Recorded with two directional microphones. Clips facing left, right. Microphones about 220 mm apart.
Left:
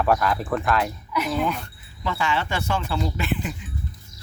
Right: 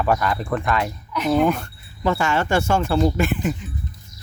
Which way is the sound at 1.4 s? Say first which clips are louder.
Right 6 dB; 45° right (ahead or behind).